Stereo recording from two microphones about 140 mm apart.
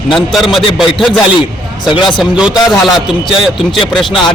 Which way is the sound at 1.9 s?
35° left (ahead or behind).